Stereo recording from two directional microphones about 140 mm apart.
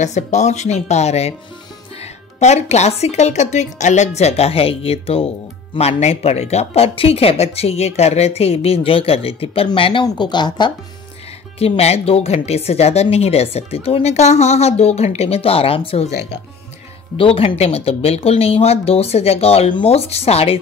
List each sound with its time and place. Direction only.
0.0 s a woman's voice: 55° left (ahead or behind)
2.4 s a woman's voice: 55° left (ahead or behind); by 10.7 s 30° left (ahead or behind)
11.5 s a woman's voice: 45° left (ahead or behind)
17.2 s a woman's voice: 40° left (ahead or behind)